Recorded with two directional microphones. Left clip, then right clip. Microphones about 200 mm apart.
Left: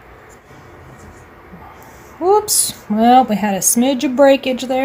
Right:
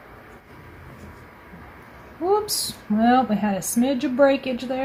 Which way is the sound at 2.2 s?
50° left (ahead or behind).